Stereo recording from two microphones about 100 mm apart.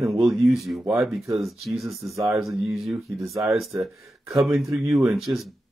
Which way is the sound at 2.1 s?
30° right (ahead or behind).